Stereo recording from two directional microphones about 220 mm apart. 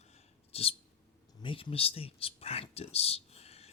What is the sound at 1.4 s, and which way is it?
Speech, 25° left (ahead or behind).